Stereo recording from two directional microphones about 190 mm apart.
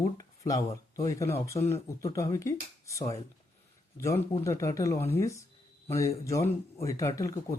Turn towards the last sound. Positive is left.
turn(degrees=15)  # may be behind; listen again after turning